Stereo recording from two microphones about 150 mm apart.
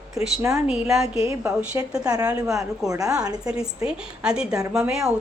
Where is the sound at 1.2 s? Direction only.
15° right (ahead or behind).